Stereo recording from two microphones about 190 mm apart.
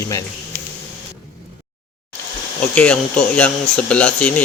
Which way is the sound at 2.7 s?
5° left (ahead or behind).